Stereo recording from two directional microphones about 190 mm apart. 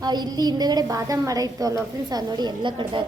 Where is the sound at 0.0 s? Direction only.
20° right (ahead or behind).